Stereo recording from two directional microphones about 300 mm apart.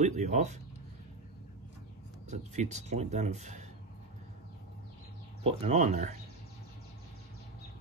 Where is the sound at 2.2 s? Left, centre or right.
Right.